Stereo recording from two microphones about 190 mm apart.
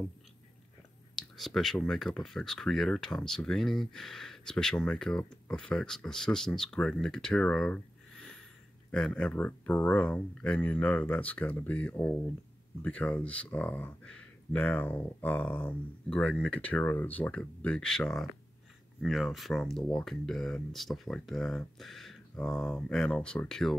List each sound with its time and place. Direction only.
1.1 s speech: centre (ahead or behind)